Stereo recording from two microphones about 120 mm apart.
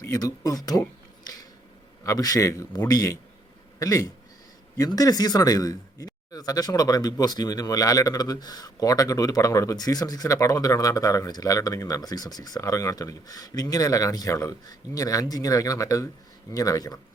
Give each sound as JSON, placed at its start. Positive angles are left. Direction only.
{"t": 0.0, "sound": "speech", "side_deg": 25}
{"t": 2.0, "sound": "a man's voice", "side_deg": 30}